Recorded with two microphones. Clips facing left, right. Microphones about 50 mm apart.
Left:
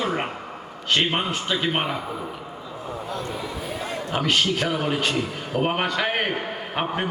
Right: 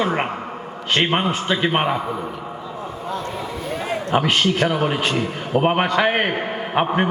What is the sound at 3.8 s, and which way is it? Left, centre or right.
A man's voice, right.